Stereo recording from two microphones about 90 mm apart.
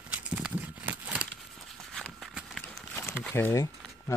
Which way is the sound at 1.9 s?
5° left (ahead or behind).